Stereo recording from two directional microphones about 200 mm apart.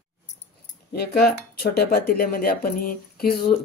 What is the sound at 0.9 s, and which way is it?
Speech, 55° left (ahead or behind).